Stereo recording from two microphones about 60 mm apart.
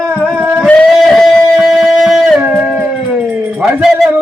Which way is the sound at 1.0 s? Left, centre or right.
Centre.